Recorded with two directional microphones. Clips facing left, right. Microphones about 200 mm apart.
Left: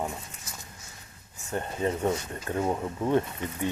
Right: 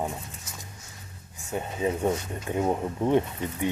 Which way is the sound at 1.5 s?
5° right (ahead or behind).